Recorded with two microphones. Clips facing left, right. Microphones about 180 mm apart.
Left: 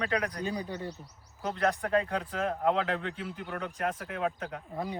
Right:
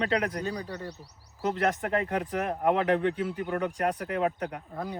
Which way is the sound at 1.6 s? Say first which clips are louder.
Left 2 dB; 20° right (ahead or behind).